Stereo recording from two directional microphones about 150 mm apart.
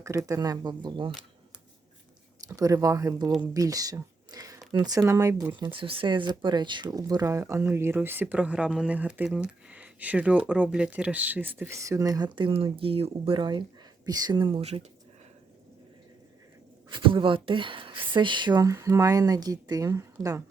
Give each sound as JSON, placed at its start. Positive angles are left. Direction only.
{"t": 0.0, "sound": "speech", "side_deg": -20}
{"t": 2.5, "sound": "speech", "side_deg": -25}
{"t": 5.5, "sound": "speech", "side_deg": -30}
{"t": 14.6, "sound": "speech", "side_deg": -45}
{"t": 16.9, "sound": "speech", "side_deg": -35}